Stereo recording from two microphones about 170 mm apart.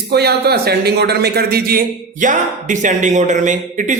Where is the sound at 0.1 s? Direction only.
70° right (ahead or behind).